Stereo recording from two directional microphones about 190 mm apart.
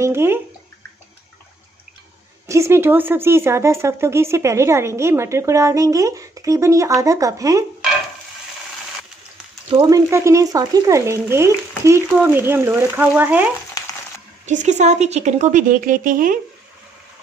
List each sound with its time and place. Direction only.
0.0 s bathtub: 15° right (ahead or behind)
2.4 s a woman's voice: 15° right (ahead or behind)
9.7 s a woman's voice: 20° right (ahead or behind)
13.8 s frying: 20° left (ahead or behind)
14.4 s speech: 40° right (ahead or behind)